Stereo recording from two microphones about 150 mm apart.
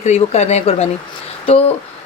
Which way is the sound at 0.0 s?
50° left (ahead or behind).